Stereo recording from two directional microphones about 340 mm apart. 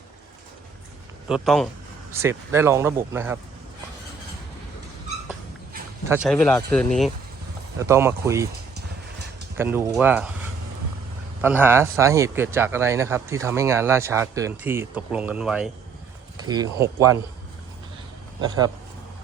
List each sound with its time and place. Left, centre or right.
1.3 s speech: centre
6.1 s speech: centre
8.7 s horse: right
9.6 s speech: centre
11.4 s speech: centre
18.3 s speech: centre